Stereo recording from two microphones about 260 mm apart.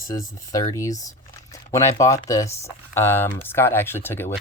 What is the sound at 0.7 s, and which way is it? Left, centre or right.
Speech, centre.